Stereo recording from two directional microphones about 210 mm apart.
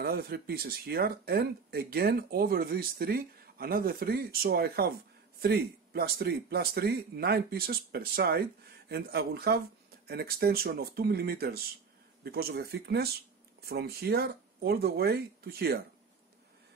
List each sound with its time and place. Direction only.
0.0 s speech: 45° right (ahead or behind)